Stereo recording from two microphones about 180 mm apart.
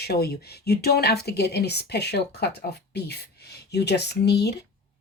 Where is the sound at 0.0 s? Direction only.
60° left (ahead or behind).